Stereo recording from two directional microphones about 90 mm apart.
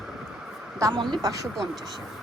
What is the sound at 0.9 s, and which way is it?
Speech, 60° right (ahead or behind).